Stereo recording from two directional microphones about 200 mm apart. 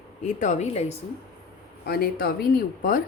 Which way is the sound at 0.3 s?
35° left (ahead or behind).